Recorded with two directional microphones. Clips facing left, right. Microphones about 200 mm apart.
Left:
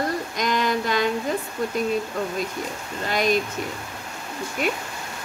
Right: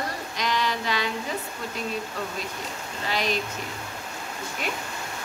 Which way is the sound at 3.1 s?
50° left (ahead or behind).